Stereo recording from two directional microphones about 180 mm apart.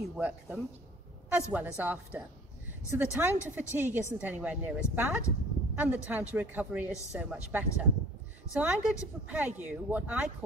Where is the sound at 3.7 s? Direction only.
10° right (ahead or behind).